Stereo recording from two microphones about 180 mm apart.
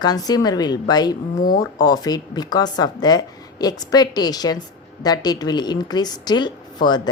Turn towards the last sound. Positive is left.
turn(degrees=25)  # may be behind; listen again after turning